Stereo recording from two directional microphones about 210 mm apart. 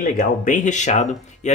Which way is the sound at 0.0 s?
40° left (ahead or behind).